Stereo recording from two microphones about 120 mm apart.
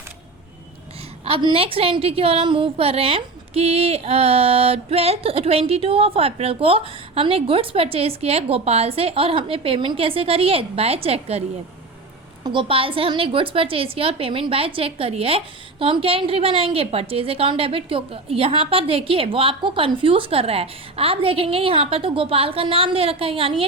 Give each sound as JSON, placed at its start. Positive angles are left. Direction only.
{"t": 1.4, "sound": "a woman's voice", "side_deg": -45}
{"t": 12.4, "sound": "a woman's voice", "side_deg": -40}